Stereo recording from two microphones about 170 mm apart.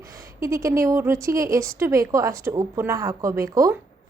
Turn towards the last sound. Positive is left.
turn(degrees=-20)  # may be behind; listen again after turning